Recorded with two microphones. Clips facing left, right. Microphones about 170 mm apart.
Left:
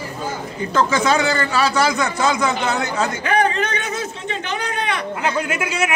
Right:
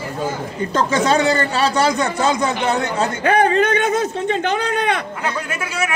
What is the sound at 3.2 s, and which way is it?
Speech, 50° right (ahead or behind).